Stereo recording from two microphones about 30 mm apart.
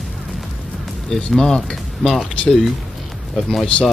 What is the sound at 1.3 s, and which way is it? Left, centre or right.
Speech, left.